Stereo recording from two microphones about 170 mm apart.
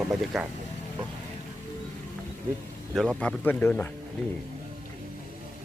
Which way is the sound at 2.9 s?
5° left (ahead or behind).